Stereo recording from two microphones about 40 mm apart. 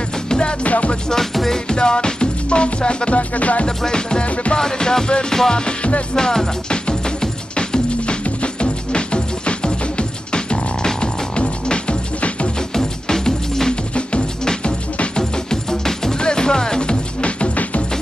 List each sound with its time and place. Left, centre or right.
0.3 s music: left
0.7 s music: left
1.3 s music: centre
1.7 s music: left
3.6 s music: centre
4.3 s music: left
4.6 s music: centre
6.1 s music: centre
12.7 s music: centre; by 17.8 s left